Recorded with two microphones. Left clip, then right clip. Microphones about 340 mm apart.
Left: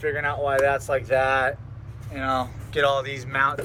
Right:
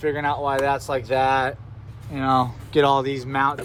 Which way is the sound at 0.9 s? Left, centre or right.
Right.